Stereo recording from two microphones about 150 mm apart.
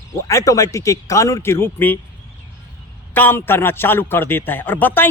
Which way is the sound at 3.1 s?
15° left (ahead or behind).